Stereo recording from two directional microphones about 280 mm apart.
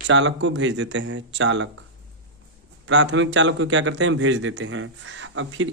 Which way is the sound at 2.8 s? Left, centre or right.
Right.